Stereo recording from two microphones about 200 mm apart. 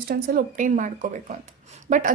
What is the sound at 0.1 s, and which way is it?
A woman's voice, 45° right (ahead or behind).